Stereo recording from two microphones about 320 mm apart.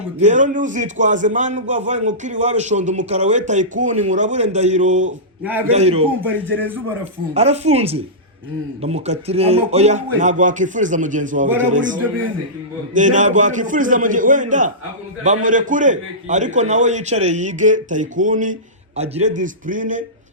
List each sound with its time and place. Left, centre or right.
0.2 s a man's voice: right
5.4 s a man's voice: centre
5.7 s a man's voice: centre
6.2 s a man's voice: centre
7.3 s a man's voice: centre